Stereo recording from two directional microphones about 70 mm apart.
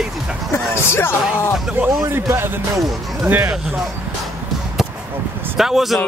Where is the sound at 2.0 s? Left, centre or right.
Right.